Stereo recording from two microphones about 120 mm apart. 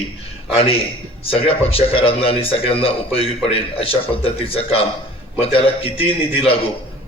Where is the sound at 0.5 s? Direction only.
55° left (ahead or behind).